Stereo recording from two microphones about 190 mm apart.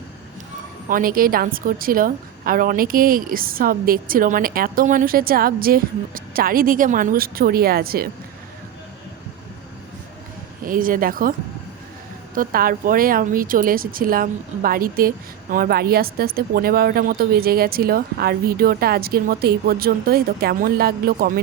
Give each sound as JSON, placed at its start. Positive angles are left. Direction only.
{"t": 0.9, "sound": "a woman's voice", "side_deg": -45}
{"t": 10.6, "sound": "a woman's voice", "side_deg": -45}